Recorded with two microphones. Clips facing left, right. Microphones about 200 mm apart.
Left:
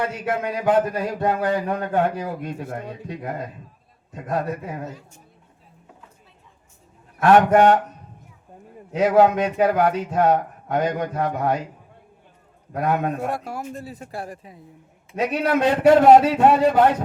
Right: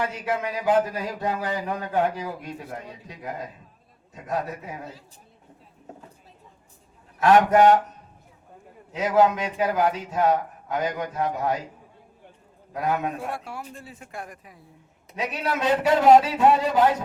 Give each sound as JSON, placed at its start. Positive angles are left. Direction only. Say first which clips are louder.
{"t": 0.0, "sound": "speech", "louder": "left 2 dB", "side_deg": 55}
{"t": 7.2, "sound": "speech", "louder": "left 2 dB", "side_deg": 55}
{"t": 8.9, "sound": "speech", "louder": "left 4 dB", "side_deg": 55}
{"t": 12.7, "sound": "speech", "louder": "left 4 dB", "side_deg": 55}
{"t": 15.1, "sound": "speech", "louder": "left 7 dB", "side_deg": 55}